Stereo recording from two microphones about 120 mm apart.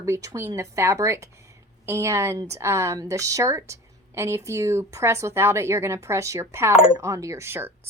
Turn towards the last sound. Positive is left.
turn(degrees=-20)  # may be behind; listen again after turning